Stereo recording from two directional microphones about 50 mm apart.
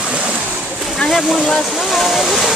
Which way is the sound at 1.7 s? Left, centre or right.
Centre.